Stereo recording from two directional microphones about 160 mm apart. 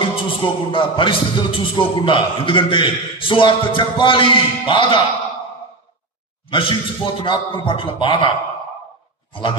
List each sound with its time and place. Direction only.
0.0 s speech: 30° left (ahead or behind)
6.5 s speech: 35° left (ahead or behind)